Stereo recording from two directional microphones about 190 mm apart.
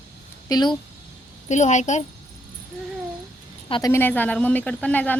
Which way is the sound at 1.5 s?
40° left (ahead or behind).